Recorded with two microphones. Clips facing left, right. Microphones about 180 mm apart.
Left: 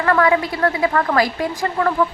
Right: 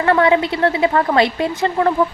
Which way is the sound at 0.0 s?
25° right (ahead or behind).